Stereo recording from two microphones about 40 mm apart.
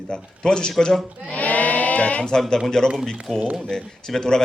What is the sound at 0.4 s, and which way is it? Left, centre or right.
Speech, centre.